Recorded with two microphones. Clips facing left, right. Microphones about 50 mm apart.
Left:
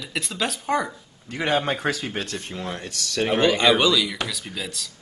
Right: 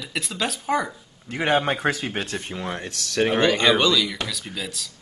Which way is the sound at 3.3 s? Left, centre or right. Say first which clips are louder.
Left 1 dB; centre.